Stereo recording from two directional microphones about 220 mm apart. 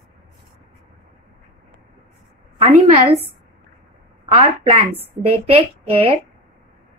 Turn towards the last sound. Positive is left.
turn(degrees=-25)  # may be behind; listen again after turning